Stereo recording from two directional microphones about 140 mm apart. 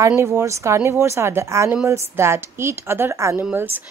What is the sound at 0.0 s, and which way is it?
A woman's voice, 20° right (ahead or behind).